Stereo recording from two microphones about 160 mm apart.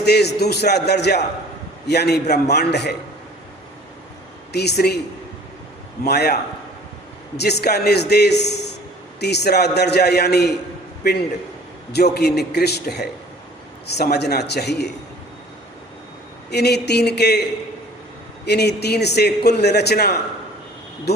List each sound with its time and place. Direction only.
0.0 s a man's voice: 90° left
4.5 s speech: 85° left
6.1 s a man's voice: 90° left
12.1 s a man's voice: 90° left
16.5 s a man's voice: 90° left
18.4 s a man's voice: 90° left